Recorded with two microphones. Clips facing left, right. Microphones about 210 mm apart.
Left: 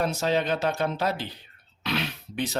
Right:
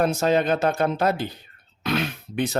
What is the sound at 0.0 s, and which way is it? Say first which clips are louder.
Speech: right 5 dB; 50° right (ahead or behind).